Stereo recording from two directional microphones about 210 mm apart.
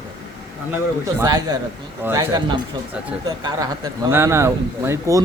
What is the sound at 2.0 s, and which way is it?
Speech, 15° right (ahead or behind).